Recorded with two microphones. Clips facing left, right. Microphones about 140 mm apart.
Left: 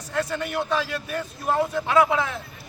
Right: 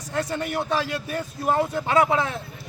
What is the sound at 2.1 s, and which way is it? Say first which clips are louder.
Speech: right 1 dB; 30° right (ahead or behind).